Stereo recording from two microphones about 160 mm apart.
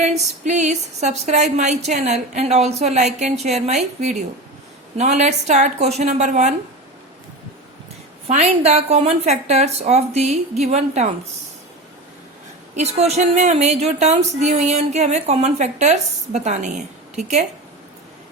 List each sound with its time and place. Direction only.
0.2 s speech: 45° right (ahead or behind)
8.3 s speech: 45° right (ahead or behind)
12.7 s speech: 45° right (ahead or behind)